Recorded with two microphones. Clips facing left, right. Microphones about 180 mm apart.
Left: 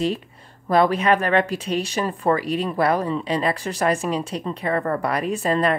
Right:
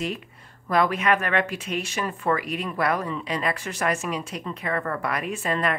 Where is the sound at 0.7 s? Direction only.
30° left (ahead or behind).